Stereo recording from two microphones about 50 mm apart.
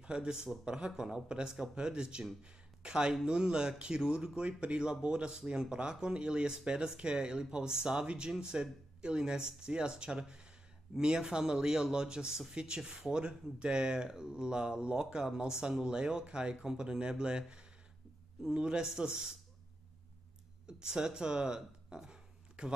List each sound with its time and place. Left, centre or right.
0.0 s a man's voice: centre
20.6 s speech: centre